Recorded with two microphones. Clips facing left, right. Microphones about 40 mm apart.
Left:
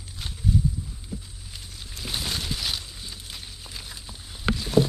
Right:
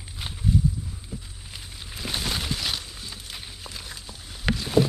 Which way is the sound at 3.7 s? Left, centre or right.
Centre.